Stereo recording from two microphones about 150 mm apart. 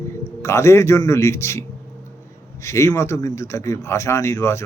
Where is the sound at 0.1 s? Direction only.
20° left (ahead or behind).